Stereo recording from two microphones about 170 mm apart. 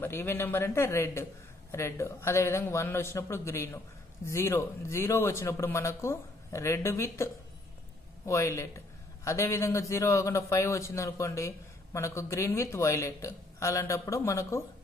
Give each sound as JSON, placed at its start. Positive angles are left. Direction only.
{"t": 0.0, "sound": "a man's voice", "side_deg": 15}
{"t": 8.3, "sound": "a man's voice", "side_deg": 15}